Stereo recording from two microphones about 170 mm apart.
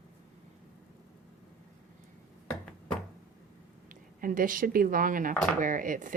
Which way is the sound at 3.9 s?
55° right (ahead or behind).